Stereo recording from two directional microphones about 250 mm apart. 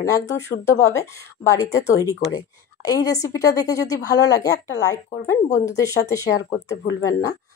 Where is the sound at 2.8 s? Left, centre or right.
Centre.